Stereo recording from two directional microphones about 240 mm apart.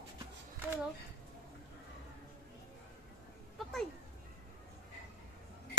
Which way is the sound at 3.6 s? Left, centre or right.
Centre.